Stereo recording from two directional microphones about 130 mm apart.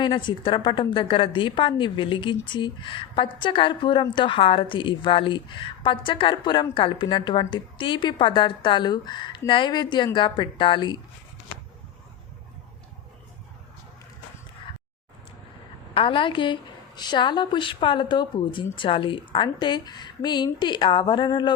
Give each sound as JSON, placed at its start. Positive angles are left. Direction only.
{"t": 0.0, "sound": "a woman's voice", "side_deg": 35}
{"t": 16.0, "sound": "a woman's voice", "side_deg": 40}